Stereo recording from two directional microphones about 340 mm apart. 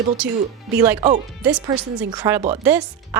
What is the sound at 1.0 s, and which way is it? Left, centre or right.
Speech, centre.